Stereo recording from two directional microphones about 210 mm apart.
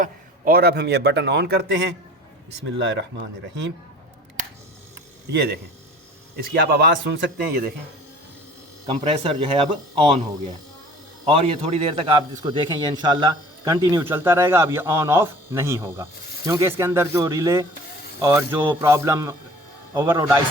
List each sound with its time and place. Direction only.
0.0 s a man's voice: 45° right (ahead or behind)
2.7 s speech: 55° right (ahead or behind)
6.3 s a man's voice: 50° right (ahead or behind)
8.9 s speech: 25° right (ahead or behind)
11.3 s a man's voice: 25° right (ahead or behind)